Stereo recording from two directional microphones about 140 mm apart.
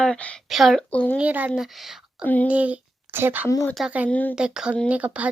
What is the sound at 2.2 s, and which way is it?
Speech, 10° left (ahead or behind).